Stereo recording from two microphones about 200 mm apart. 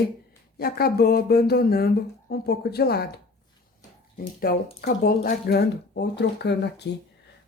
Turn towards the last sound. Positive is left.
turn(degrees=55)  # may be behind; listen again after turning